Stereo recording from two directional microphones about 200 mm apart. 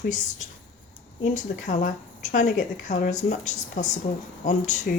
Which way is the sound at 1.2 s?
40° left (ahead or behind).